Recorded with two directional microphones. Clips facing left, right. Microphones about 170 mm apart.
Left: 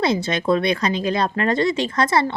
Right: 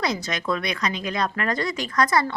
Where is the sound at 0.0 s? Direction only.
25° left (ahead or behind).